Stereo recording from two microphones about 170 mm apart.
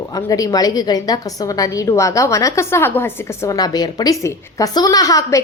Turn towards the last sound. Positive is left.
turn(degrees=20)  # may be behind; listen again after turning